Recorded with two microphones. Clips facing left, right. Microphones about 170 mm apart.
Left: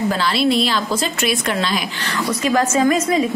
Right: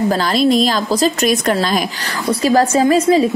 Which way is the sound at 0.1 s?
40° right (ahead or behind).